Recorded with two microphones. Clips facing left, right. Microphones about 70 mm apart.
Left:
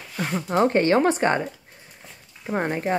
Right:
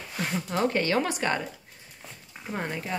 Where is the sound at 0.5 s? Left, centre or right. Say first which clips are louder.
Left 7 dB; left.